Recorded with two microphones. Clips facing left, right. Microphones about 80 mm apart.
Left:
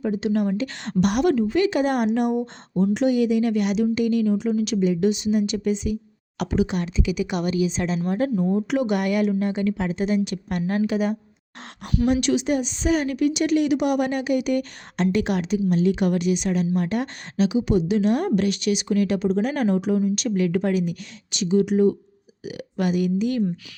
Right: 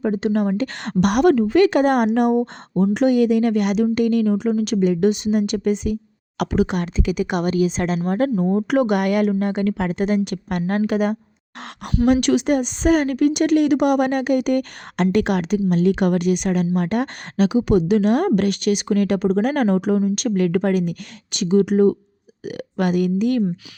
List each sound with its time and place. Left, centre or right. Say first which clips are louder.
0.0 s a woman's voice: right 3 dB; right